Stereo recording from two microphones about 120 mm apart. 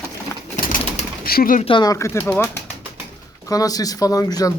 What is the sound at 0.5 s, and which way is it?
Bird, 90° left.